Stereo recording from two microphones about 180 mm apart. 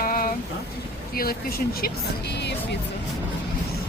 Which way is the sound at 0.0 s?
50° left (ahead or behind).